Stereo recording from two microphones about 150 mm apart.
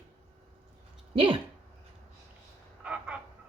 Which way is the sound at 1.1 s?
35° right (ahead or behind).